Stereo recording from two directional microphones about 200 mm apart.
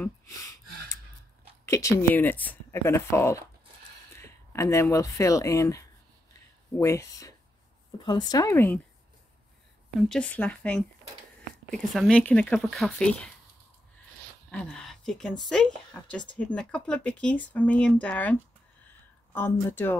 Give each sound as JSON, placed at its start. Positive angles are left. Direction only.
{"t": 0.0, "sound": "gasp", "side_deg": 15}
{"t": 1.7, "sound": "a woman's voice", "side_deg": 15}
{"t": 9.9, "sound": "speech", "side_deg": 5}
{"t": 14.5, "sound": "speech", "side_deg": 5}